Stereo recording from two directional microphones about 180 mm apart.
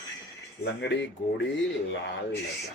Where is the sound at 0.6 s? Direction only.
80° left.